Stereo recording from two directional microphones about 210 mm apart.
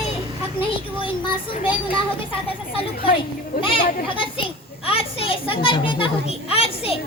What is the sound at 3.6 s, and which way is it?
A child's voice, 25° left (ahead or behind).